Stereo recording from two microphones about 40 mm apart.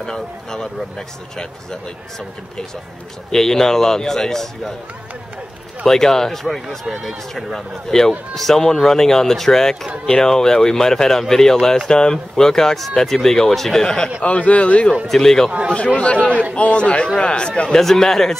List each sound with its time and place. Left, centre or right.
0.0 s speech: centre
5.9 s speech: centre
14.2 s speech: left
15.1 s speech: centre
16.0 s speech: left
17.6 s speech: centre